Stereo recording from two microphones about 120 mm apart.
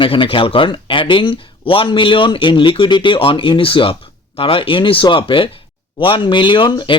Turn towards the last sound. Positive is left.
turn(degrees=40)  # may be behind; listen again after turning